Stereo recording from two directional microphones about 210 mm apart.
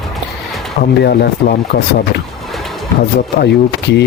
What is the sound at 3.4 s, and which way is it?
Speech, 55° left (ahead or behind).